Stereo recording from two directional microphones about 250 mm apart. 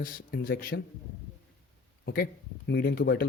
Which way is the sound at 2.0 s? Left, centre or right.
Left.